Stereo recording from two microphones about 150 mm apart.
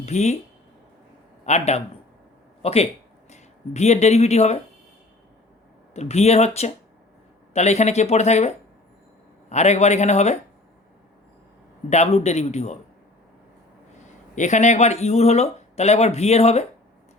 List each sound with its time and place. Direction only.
0.0 s speech: 50° left (ahead or behind)
1.5 s speech: 50° left (ahead or behind)
5.9 s speech: 45° left (ahead or behind)
11.9 s speech: 45° left (ahead or behind)
14.3 s speech: 55° left (ahead or behind)